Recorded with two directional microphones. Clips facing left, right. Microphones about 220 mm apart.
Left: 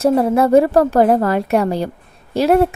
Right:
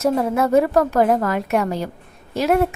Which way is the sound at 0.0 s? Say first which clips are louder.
Left 5 dB; 30° left (ahead or behind).